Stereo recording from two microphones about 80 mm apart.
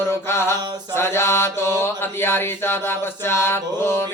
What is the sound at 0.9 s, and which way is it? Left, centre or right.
Mantra, left.